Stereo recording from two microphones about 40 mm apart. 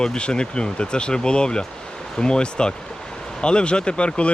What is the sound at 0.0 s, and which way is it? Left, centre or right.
Speech, left.